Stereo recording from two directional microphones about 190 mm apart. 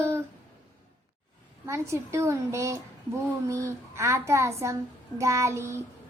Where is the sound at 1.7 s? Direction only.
15° right (ahead or behind).